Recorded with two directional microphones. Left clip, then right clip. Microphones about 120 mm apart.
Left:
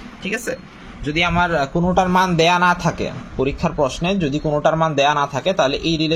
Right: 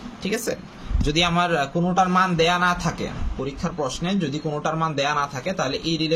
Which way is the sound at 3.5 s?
60° left (ahead or behind).